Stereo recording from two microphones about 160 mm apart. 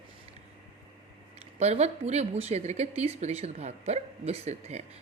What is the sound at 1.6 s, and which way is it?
Speech, 40° right (ahead or behind).